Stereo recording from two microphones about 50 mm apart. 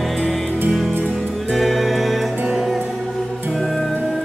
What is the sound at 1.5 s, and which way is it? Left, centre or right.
Music, centre.